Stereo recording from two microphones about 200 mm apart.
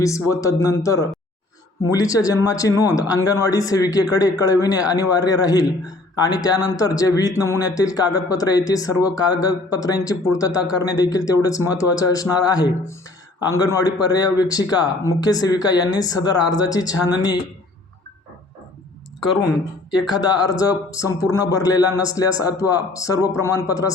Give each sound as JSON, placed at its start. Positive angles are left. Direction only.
{"t": 0.0, "sound": "speech", "side_deg": 15}
{"t": 19.9, "sound": "speech", "side_deg": 20}